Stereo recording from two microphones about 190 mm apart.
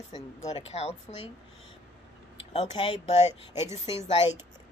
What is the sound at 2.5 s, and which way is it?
Speech, 30° left (ahead or behind).